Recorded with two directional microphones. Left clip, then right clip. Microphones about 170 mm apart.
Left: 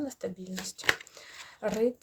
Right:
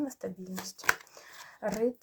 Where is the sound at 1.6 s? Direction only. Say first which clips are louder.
Left 2 dB; 25° left (ahead or behind).